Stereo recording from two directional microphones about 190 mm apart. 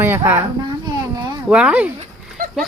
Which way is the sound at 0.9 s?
20° right (ahead or behind).